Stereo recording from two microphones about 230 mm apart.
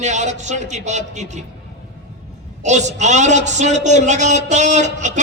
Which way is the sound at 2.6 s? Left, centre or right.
Right.